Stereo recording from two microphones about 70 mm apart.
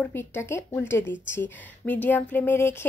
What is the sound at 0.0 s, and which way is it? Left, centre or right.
A woman's voice, left.